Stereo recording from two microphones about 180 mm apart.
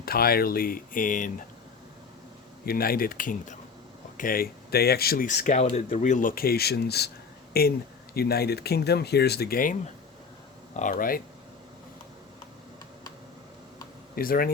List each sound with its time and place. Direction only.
0.0 s speech: 55° left (ahead or behind)
2.6 s speech: 55° left (ahead or behind)
10.8 s speech: 50° left (ahead or behind)
14.2 s speech: 55° left (ahead or behind)